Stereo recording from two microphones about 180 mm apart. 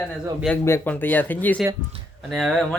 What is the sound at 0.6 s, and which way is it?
Speech, 10° left (ahead or behind).